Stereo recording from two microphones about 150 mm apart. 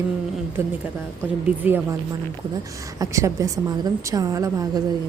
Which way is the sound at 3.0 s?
20° right (ahead or behind).